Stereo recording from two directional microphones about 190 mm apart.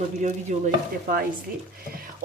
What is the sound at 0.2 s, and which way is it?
A woman's voice, 40° right (ahead or behind).